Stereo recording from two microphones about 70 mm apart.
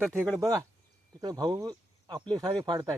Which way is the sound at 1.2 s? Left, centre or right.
Right.